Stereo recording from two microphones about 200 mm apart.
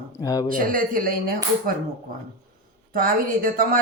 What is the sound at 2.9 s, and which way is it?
Speech, 45° right (ahead or behind).